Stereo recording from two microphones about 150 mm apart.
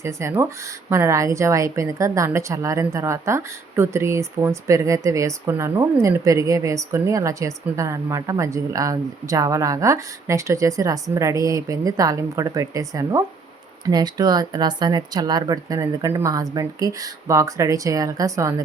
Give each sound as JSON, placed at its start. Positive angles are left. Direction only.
{"t": 0.0, "sound": "a woman's voice", "side_deg": -20}